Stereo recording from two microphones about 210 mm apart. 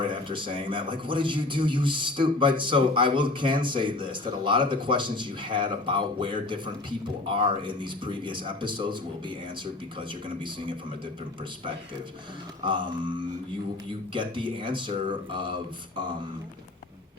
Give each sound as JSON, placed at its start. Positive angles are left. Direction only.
{"t": 0.1, "sound": "a man's voice", "side_deg": -25}
{"t": 10.0, "sound": "a man's voice", "side_deg": -25}
{"t": 12.6, "sound": "a man's voice", "side_deg": -25}